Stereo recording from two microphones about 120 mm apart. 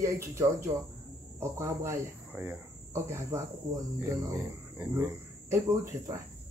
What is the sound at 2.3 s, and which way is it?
Cricket, 15° right (ahead or behind).